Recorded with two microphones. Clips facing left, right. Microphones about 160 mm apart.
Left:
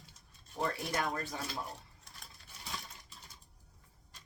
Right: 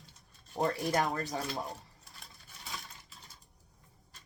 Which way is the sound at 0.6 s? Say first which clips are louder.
Right 5 dB; 40° right (ahead or behind).